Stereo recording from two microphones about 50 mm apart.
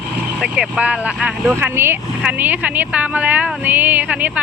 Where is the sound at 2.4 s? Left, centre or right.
Right.